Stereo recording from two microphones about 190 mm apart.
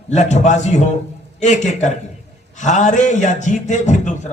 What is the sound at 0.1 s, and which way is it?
A man's voice, 40° left (ahead or behind).